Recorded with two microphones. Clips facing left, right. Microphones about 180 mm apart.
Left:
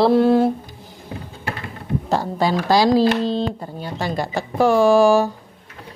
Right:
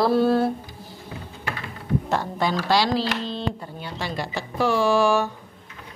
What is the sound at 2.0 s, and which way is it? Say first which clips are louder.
A woman's voice: left 7 dB; 35° left (ahead or behind).